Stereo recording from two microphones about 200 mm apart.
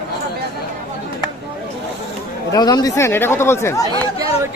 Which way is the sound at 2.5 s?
20° left (ahead or behind).